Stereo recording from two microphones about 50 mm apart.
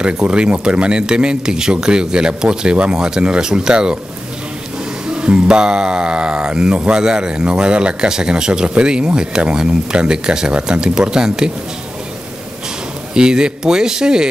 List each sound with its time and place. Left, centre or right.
0.0 s speech: right
5.0 s speech: centre
13.1 s speech: centre